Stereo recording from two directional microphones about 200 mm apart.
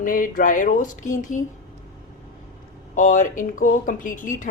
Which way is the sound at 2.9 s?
40° left (ahead or behind).